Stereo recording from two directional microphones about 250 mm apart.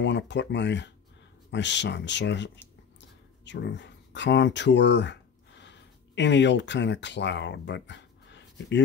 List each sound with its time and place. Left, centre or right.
0.0 s speech: left